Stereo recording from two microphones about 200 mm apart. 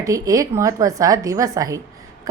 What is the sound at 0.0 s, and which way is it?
A woman's voice, 15° right (ahead or behind).